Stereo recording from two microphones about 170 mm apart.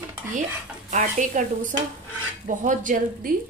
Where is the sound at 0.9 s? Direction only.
45° right (ahead or behind).